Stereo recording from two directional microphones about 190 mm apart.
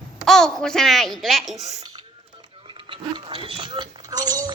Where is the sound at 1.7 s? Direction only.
25° right (ahead or behind).